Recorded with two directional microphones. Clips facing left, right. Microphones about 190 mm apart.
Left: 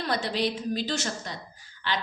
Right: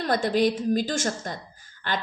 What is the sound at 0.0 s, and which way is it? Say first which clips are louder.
A woman's voice: right 6 dB; 50° right (ahead or behind).